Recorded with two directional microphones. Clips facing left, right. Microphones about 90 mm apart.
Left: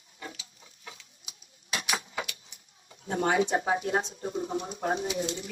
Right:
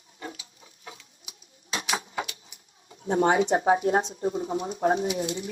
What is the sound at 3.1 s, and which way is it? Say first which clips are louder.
Speech: right 4 dB; 30° right (ahead or behind).